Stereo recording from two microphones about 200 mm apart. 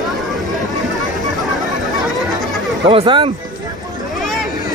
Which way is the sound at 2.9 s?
25° right (ahead or behind).